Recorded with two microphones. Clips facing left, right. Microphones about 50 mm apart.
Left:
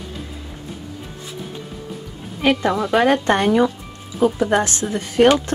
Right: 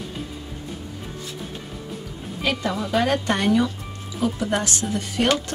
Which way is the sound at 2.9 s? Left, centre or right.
Left.